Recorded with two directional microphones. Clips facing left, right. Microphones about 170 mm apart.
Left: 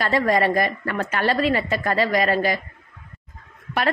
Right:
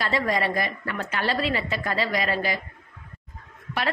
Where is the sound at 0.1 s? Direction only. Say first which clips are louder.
Left 7 dB; 50° left (ahead or behind).